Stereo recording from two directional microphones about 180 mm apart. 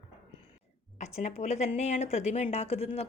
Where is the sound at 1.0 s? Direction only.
40° left (ahead or behind).